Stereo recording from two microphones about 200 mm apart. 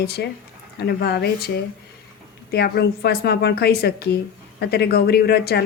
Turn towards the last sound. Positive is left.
turn(degrees=55)  # may be behind; listen again after turning